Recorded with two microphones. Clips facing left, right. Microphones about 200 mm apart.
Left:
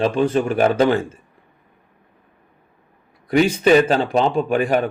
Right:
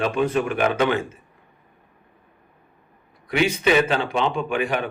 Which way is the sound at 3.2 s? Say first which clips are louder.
Left 5 dB; 40° left (ahead or behind).